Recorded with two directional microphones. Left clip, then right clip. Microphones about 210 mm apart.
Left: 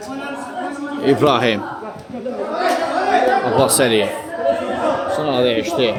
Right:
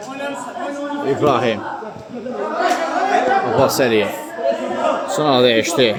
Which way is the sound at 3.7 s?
5° right (ahead or behind).